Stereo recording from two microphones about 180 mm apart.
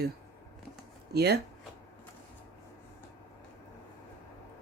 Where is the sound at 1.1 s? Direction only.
65° right (ahead or behind).